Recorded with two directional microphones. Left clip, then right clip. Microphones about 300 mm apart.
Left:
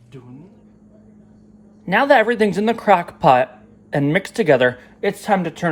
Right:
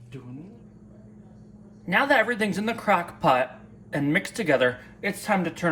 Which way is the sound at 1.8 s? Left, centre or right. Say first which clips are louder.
Left 7 dB; left.